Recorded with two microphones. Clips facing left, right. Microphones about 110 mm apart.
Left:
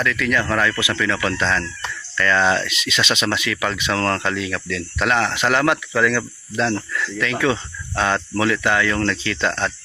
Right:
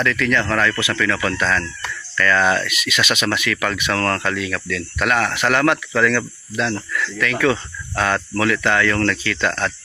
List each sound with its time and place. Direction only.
0.0 s speech: 5° left (ahead or behind)